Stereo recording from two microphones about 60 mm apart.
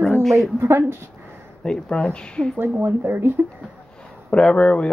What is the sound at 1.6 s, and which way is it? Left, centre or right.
Speech, centre.